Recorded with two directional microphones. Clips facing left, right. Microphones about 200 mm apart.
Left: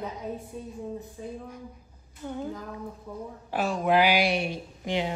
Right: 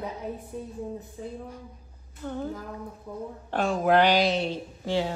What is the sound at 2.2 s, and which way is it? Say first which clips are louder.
Speech: right 1 dB; 15° left (ahead or behind).